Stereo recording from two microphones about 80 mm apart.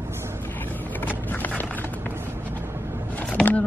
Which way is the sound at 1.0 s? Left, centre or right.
Left.